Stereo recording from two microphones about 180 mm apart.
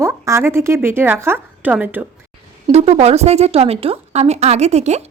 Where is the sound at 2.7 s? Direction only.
35° right (ahead or behind).